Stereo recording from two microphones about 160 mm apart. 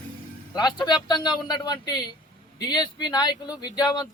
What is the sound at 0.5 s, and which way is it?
Speech, 25° left (ahead or behind).